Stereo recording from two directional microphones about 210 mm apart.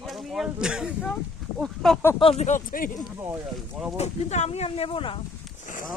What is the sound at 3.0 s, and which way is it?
Speech, 10° right (ahead or behind).